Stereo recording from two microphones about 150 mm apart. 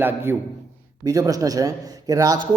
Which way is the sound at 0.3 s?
15° right (ahead or behind).